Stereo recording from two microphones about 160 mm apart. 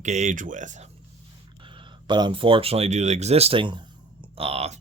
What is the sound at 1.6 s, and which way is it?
Speech, 30° right (ahead or behind).